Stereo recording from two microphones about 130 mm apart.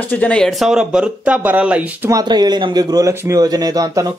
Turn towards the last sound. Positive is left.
turn(degrees=-25)  # may be behind; listen again after turning